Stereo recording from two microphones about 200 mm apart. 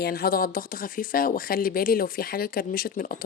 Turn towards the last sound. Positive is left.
turn(degrees=45)  # may be behind; listen again after turning